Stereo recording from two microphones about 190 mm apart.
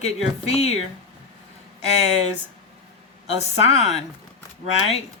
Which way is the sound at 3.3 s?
35° left (ahead or behind).